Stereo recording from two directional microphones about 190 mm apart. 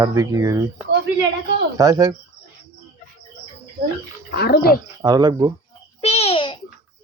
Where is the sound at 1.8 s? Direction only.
20° right (ahead or behind).